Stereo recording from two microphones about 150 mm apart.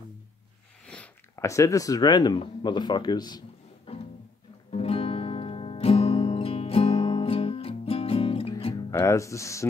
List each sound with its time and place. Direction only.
0.8 s a sound: 10° left (ahead or behind)
1.3 s speech: 20° left (ahead or behind)
3.9 s music: 40° left (ahead or behind)
8.9 s speech: 20° left (ahead or behind)